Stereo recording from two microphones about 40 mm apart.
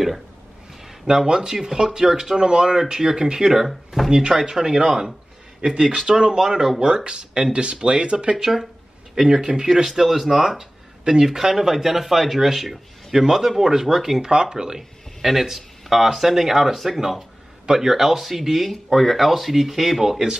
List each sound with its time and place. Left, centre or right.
1.0 s speech: centre
4.6 s speech: centre
8.4 s speech: centre
14.2 s speech: centre
14.8 s speech: centre